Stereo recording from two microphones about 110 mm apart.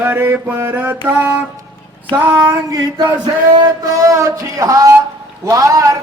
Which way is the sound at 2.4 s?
35° right (ahead or behind).